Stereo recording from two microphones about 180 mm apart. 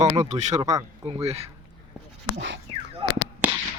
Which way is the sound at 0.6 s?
20° right (ahead or behind).